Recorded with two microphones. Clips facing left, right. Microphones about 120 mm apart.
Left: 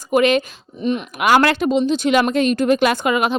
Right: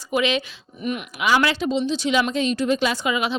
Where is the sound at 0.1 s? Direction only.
50° left (ahead or behind).